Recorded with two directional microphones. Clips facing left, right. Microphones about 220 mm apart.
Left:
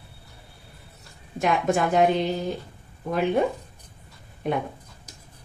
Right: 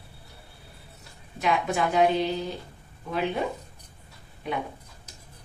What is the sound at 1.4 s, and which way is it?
Speech, 50° left (ahead or behind).